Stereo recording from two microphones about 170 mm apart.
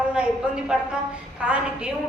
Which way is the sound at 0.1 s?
5° right (ahead or behind).